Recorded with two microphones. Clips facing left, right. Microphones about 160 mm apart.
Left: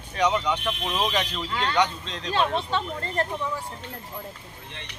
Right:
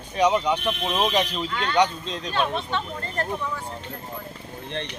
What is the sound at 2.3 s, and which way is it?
Speech, 30° left (ahead or behind).